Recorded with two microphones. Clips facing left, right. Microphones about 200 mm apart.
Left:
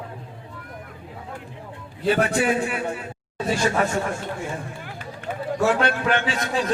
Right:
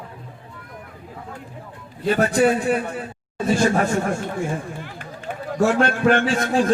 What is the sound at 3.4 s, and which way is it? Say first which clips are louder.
Speech: right 3 dB; 50° right (ahead or behind).